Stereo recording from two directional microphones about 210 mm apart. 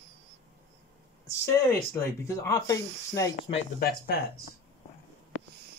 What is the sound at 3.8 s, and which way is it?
Speech, 45° left (ahead or behind).